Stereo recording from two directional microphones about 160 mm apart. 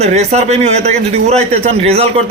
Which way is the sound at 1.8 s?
40° right (ahead or behind).